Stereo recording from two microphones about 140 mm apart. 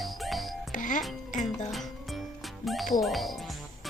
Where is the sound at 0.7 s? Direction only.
70° left (ahead or behind).